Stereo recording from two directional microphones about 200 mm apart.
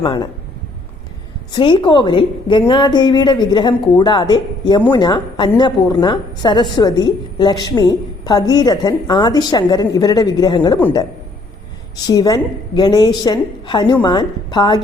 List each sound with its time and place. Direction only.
0.0 s a woman's voice: 20° left (ahead or behind)
1.5 s a woman's voice: 25° left (ahead or behind)
10.8 s a woman's voice: 10° left (ahead or behind)